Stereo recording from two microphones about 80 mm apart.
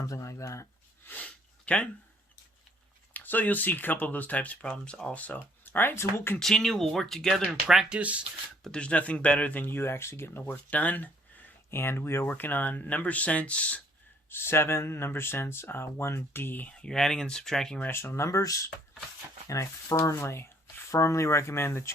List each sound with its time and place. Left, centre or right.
0.0 s speech: left
1.0 s a sound: centre
3.1 s speech: left
6.4 s speech: centre
7.9 s speech: centre
8.6 s speech: centre; by 10.4 s left
10.5 s speech: centre
14.3 s speech: left
16.7 s speech: centre
17.8 s speech: left